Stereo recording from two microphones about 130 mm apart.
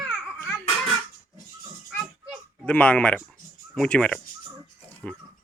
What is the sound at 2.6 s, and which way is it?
Speech, 10° left (ahead or behind).